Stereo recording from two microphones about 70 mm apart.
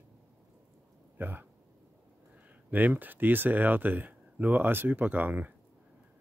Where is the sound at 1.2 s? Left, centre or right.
Right.